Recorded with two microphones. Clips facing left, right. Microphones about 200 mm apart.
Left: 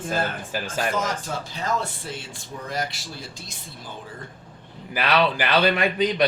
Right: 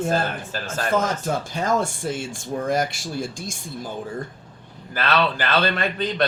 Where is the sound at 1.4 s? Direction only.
50° right (ahead or behind).